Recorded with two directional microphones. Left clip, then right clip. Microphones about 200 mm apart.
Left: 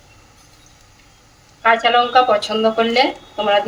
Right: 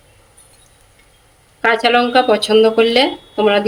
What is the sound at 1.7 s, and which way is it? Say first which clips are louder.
Speech: right 1 dB; 50° right (ahead or behind).